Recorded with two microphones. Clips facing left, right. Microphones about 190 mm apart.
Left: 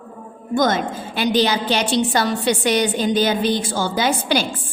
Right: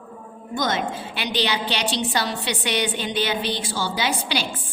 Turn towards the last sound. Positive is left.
turn(degrees=45)  # may be behind; listen again after turning